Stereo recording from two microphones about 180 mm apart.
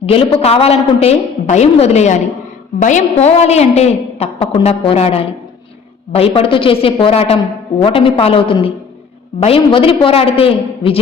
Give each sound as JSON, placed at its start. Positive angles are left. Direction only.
{"t": 0.0, "sound": "a woman's voice", "side_deg": 30}